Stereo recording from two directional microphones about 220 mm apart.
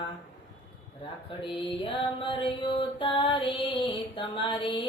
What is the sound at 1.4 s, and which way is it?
Mantra, 25° left (ahead or behind).